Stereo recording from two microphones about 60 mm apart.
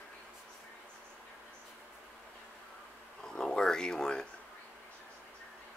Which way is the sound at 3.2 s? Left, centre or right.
Centre.